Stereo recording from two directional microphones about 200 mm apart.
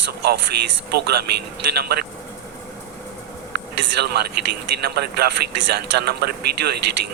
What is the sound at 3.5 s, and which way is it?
Speech, 55° right (ahead or behind).